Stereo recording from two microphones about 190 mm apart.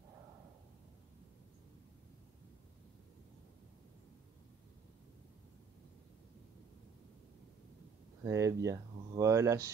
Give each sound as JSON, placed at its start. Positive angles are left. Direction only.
{"t": 8.2, "sound": "speech", "side_deg": -15}